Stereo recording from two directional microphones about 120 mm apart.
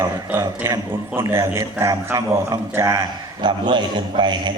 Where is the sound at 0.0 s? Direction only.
25° right (ahead or behind).